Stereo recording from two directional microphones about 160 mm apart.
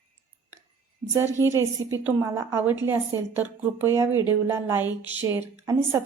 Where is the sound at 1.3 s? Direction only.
20° right (ahead or behind).